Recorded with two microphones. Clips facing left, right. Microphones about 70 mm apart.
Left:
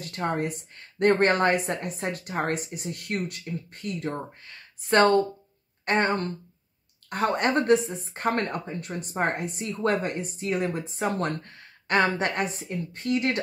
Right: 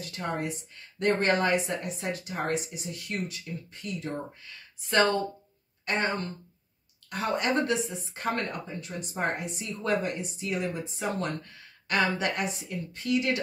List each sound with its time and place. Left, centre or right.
0.0 s speech: left